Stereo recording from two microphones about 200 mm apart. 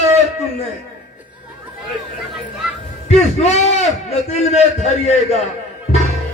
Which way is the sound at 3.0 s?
35° left (ahead or behind).